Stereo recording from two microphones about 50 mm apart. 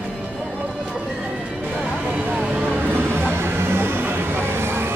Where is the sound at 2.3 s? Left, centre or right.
Right.